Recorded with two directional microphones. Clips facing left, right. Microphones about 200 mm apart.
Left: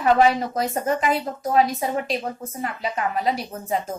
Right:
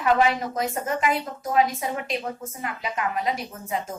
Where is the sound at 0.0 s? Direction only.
35° left (ahead or behind).